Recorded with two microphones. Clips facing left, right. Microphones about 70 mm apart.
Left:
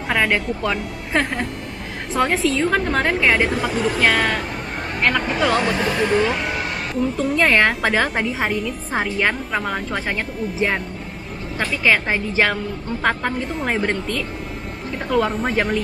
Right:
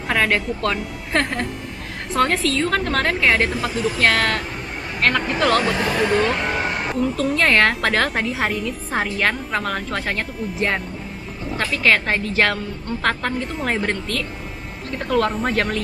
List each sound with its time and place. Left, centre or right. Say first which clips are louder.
0.1 s a woman's voice: even; centre